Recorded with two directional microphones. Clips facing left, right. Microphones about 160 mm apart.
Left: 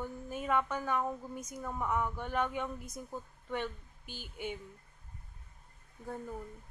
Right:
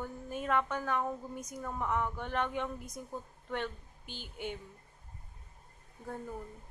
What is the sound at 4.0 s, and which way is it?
Speech, 45° left (ahead or behind).